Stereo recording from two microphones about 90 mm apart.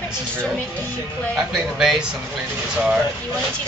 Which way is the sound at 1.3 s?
Centre (ahead or behind).